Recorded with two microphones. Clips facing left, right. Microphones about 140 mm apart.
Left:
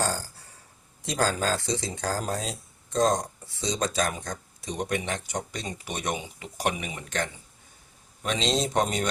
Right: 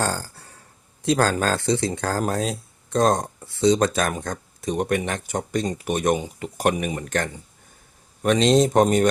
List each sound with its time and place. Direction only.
0.0 s speech: 65° right (ahead or behind); by 9.0 s 50° right (ahead or behind)